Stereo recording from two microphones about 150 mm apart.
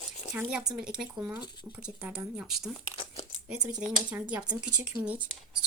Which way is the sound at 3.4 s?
10° right (ahead or behind).